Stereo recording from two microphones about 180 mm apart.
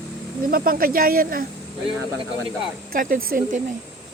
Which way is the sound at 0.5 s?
55° right (ahead or behind).